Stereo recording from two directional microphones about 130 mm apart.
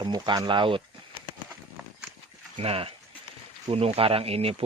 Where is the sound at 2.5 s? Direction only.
45° right (ahead or behind).